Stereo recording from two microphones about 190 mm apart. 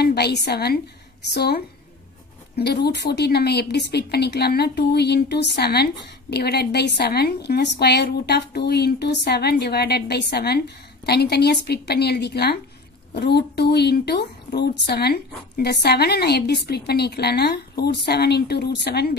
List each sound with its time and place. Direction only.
0.0 s a woman's voice: 60° left (ahead or behind)